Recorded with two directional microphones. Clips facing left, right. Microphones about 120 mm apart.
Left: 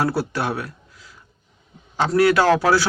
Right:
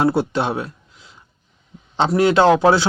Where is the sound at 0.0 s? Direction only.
20° right (ahead or behind).